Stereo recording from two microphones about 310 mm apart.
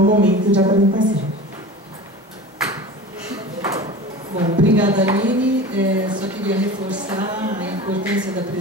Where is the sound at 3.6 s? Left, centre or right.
Centre.